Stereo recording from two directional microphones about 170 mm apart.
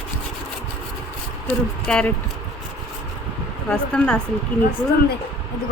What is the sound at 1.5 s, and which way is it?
Speech, 5° left (ahead or behind).